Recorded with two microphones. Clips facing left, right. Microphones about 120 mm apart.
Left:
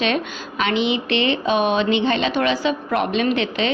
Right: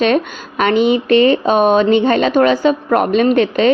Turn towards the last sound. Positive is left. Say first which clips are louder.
# right 8 dB
turn(degrees=-45)  # may be behind; listen again after turning